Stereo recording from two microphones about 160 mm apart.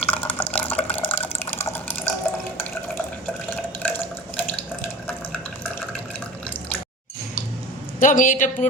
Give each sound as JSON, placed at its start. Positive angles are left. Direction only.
{"t": 0.0, "sound": "water", "side_deg": 10}
{"t": 3.8, "sound": "drip", "side_deg": 10}
{"t": 7.9, "sound": "a man's voice", "side_deg": 55}